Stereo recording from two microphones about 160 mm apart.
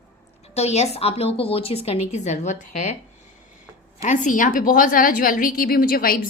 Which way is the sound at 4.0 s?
50° left (ahead or behind).